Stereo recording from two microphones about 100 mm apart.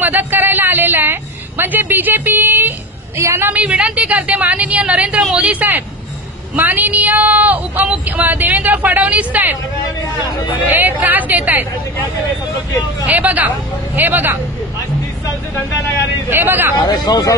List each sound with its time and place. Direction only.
0.0 s a woman's voice: 20° right (ahead or behind)
10.7 s a woman's voice: 20° right (ahead or behind)
13.0 s a woman's voice: 15° right (ahead or behind)
16.3 s speech: 20° right (ahead or behind)
16.7 s speech: 45° left (ahead or behind)